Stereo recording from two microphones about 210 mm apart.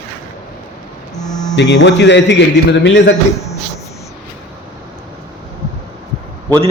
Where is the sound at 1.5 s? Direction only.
55° left (ahead or behind).